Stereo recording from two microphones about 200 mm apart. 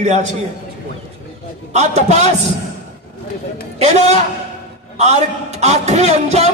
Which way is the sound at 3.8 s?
35° right (ahead or behind).